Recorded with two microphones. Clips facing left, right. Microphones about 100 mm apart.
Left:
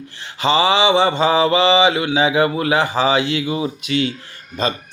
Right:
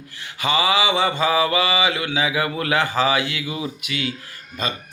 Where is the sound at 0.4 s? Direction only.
30° left (ahead or behind).